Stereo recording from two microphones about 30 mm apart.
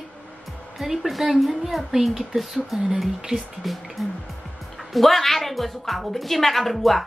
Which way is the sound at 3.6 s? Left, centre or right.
Centre.